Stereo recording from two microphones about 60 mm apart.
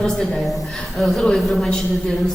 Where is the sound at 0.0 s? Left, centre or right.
Centre.